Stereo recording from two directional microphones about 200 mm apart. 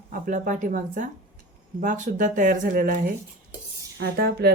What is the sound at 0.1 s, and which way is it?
Speech, 40° right (ahead or behind).